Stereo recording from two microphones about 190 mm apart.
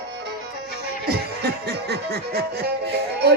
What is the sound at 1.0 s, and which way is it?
Music, 55° right (ahead or behind).